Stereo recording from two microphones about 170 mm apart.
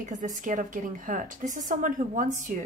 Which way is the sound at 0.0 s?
45° right (ahead or behind).